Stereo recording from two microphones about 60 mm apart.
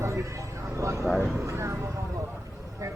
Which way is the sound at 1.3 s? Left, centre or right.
Right.